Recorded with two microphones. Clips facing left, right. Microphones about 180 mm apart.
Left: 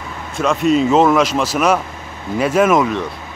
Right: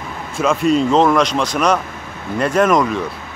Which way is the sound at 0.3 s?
Centre (ahead or behind).